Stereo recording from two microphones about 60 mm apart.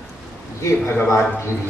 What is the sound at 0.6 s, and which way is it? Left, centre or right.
Speech, left.